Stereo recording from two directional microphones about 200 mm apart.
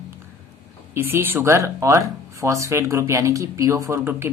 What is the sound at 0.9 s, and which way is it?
Speech, 10° right (ahead or behind).